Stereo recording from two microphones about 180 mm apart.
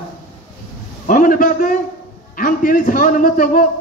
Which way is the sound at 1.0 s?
50° left (ahead or behind).